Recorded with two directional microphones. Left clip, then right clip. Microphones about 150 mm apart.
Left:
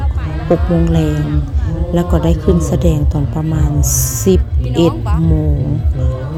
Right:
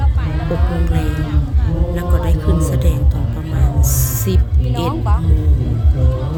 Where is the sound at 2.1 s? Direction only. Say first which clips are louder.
Left 8 dB; 30° left (ahead or behind).